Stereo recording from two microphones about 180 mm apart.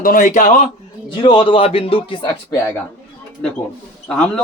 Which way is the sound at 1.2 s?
25° left (ahead or behind).